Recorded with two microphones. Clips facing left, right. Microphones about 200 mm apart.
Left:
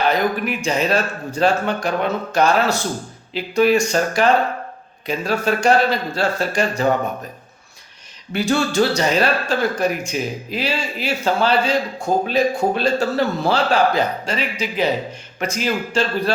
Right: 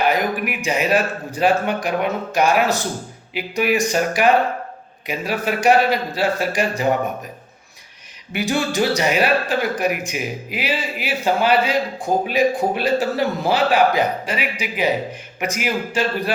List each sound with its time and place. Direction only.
0.0 s a man's voice: 10° right (ahead or behind)
8.3 s a man's voice: 15° right (ahead or behind)